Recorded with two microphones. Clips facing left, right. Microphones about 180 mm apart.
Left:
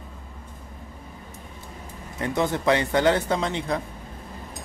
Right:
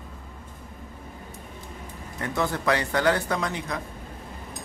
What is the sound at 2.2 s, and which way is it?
Speech, 20° left (ahead or behind).